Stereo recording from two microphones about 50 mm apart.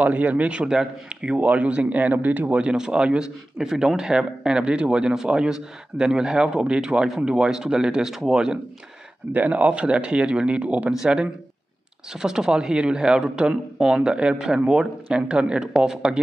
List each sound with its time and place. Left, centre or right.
0.0 s a man's voice: right
2.7 s speech: centre
9.3 s a man's voice: right; by 15.9 s centre